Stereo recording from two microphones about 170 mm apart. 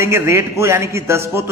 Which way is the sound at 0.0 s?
15° right (ahead or behind).